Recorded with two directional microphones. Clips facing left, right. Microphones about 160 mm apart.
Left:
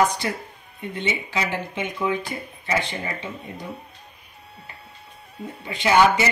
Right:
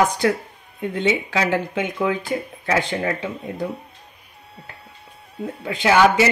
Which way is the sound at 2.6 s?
85° right.